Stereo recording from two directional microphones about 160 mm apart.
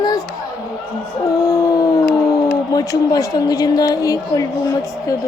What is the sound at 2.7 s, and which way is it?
A woman's voice, 25° left (ahead or behind).